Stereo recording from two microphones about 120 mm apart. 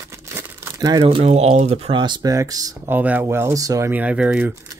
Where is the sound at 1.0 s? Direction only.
55° right (ahead or behind).